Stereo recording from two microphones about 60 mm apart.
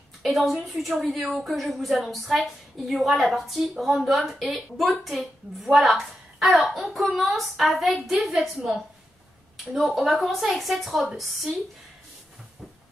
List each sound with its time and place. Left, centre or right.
0.2 s a woman's voice: centre
9.8 s a woman's voice: centre